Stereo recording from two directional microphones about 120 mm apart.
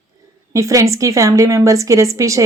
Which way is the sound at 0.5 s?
25° right (ahead or behind).